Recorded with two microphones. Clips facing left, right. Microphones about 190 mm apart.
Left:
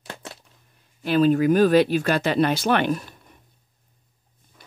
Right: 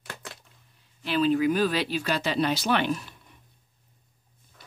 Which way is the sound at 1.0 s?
45° left (ahead or behind).